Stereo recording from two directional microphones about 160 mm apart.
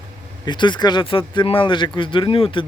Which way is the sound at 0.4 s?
30° left (ahead or behind).